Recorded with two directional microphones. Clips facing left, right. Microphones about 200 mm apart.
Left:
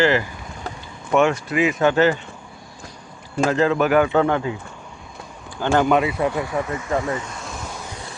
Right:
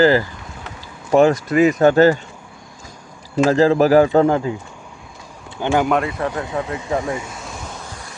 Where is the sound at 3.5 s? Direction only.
35° right (ahead or behind).